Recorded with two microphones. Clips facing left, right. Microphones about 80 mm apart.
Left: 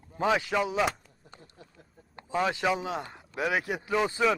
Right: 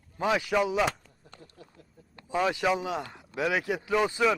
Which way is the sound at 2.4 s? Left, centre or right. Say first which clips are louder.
Right 1 dB; left.